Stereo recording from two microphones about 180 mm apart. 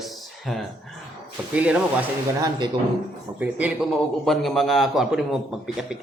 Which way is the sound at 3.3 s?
10° right (ahead or behind).